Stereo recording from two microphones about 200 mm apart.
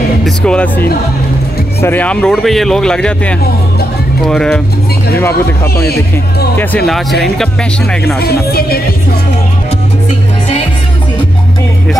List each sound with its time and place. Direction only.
0.2 s speech: 5° left (ahead or behind)
6.5 s speech: 10° left (ahead or behind)
8.2 s speech: 50° left (ahead or behind)